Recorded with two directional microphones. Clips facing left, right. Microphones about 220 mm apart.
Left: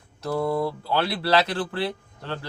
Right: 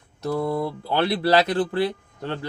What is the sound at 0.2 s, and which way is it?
Speech, 20° right (ahead or behind).